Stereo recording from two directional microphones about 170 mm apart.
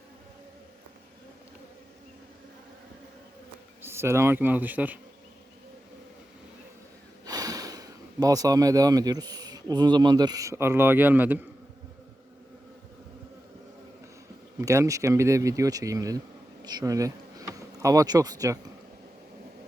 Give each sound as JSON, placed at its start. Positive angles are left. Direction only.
{"t": 3.8, "sound": "speech", "side_deg": -15}
{"t": 7.3, "sound": "speech", "side_deg": -20}
{"t": 14.6, "sound": "speech", "side_deg": -15}